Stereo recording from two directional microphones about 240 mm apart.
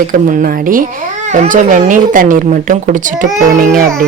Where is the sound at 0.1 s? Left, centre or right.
Right.